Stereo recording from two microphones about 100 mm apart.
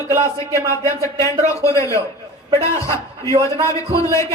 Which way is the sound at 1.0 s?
30° left (ahead or behind).